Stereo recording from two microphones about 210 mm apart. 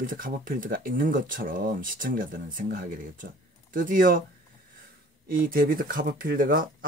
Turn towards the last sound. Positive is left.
turn(degrees=-40)  # may be behind; listen again after turning